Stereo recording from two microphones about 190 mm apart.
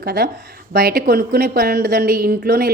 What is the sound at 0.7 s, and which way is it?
Speech, 55° right (ahead or behind).